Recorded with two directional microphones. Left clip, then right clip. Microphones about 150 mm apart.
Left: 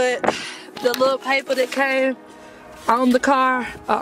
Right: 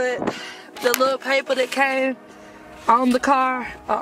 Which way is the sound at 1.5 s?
10° right (ahead or behind).